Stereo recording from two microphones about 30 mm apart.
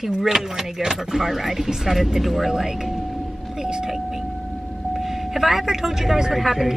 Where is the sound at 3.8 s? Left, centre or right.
Centre.